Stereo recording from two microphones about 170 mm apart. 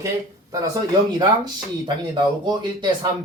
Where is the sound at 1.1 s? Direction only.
25° right (ahead or behind).